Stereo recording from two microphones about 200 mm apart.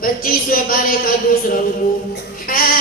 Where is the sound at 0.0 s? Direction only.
45° left (ahead or behind).